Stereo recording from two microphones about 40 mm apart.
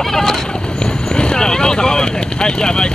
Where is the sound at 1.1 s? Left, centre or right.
Left.